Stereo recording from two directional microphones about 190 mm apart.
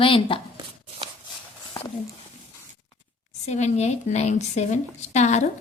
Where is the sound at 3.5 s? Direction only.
35° left (ahead or behind).